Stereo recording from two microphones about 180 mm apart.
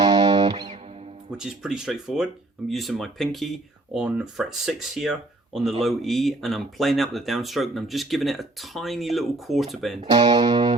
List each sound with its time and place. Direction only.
0.0 s music: 20° right (ahead or behind)
1.3 s speech: 5° right (ahead or behind)
10.0 s music: 20° right (ahead or behind)